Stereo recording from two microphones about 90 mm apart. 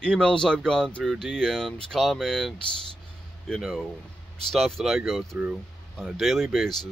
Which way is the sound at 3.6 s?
Centre (ahead or behind).